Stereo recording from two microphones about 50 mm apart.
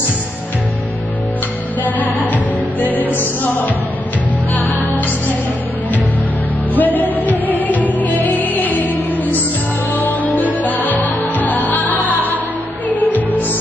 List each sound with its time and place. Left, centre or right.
1.8 s music: left
6.8 s music: left